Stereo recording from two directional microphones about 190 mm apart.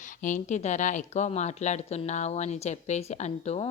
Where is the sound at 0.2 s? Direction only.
40° left (ahead or behind).